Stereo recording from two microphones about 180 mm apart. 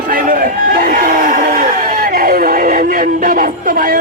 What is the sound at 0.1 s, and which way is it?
A man's voice, 50° right (ahead or behind).